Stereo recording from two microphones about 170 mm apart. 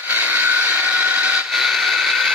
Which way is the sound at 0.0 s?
10° right (ahead or behind).